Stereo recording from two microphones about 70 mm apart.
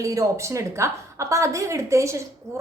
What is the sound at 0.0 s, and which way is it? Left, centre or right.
A woman's voice, right.